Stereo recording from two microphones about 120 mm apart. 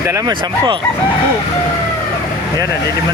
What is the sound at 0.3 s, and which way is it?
Speech, 35° right (ahead or behind).